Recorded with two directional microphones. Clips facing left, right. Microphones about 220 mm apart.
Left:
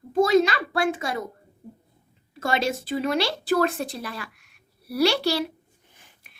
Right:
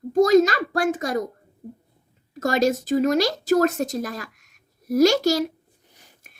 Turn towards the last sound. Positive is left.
turn(degrees=-45)  # may be behind; listen again after turning